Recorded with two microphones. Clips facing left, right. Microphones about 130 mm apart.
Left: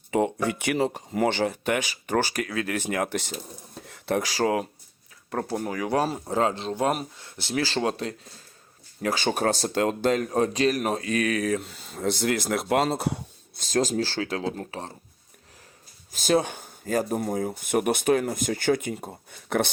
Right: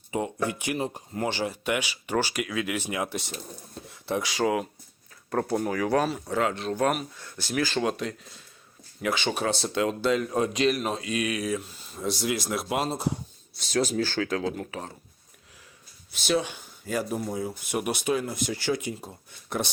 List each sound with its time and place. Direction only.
0.1 s speech: 65° left (ahead or behind)
3.8 s a sound: 60° left (ahead or behind)
4.3 s speech: 35° left (ahead or behind)
5.5 s speech: 25° right (ahead or behind)
5.7 s speech: 20° left (ahead or behind)
6.0 s speech: 30° left (ahead or behind)
10.8 s speech: 55° left (ahead or behind)
13.7 s speech: 40° left (ahead or behind)
16.1 s speech: 45° left (ahead or behind)